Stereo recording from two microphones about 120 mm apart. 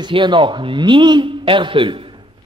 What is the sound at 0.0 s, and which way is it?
A man's voice, 40° right (ahead or behind).